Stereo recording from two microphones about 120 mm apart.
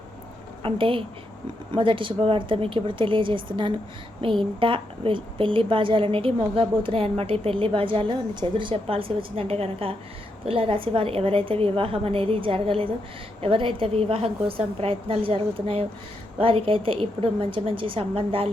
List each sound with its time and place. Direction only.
0.6 s a woman's voice: 45° right (ahead or behind)